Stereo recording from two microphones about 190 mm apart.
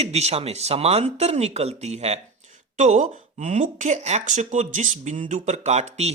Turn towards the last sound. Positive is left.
turn(degrees=-35)  # may be behind; listen again after turning